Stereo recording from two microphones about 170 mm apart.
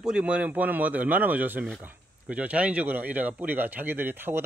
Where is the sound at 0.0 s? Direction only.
5° right (ahead or behind).